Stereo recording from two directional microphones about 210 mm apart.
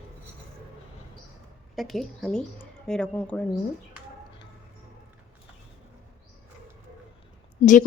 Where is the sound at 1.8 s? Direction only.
Centre (ahead or behind).